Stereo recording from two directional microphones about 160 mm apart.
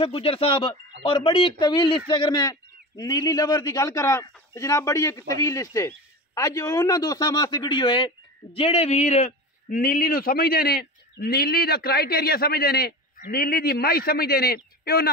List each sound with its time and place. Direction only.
0.0 s a man's voice: 35° left (ahead or behind); by 15.0 s 75° left (ahead or behind)